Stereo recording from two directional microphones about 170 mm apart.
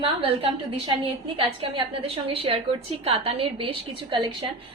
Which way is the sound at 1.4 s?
30° right (ahead or behind).